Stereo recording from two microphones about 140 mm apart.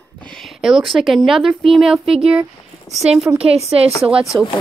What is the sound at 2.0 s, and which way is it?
Speech, 40° right (ahead or behind).